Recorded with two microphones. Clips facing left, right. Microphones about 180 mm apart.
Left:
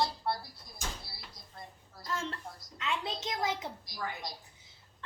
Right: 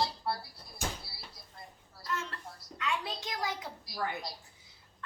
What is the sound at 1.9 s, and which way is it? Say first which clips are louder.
A woman's voice: left 1 dB; 25° left (ahead or behind).